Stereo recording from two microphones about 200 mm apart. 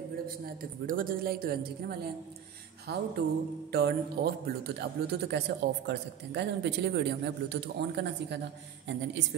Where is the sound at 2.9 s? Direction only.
55° right (ahead or behind).